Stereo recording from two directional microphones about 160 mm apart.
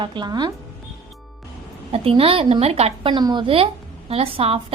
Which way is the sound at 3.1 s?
30° right (ahead or behind).